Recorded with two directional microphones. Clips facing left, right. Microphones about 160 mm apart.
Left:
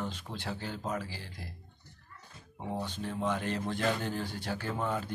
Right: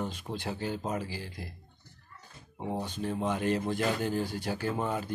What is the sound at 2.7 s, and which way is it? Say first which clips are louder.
Speech: right 3 dB; 15° right (ahead or behind).